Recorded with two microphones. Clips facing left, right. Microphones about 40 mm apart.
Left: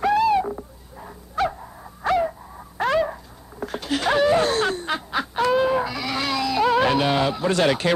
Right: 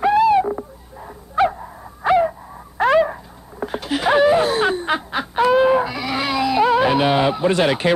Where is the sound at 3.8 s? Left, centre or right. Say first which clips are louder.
Right 4 dB; centre.